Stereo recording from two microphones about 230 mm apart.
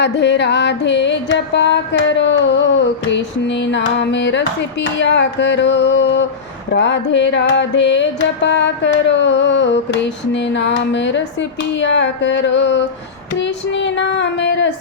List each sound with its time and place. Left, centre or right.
0.0 s carnatic music: left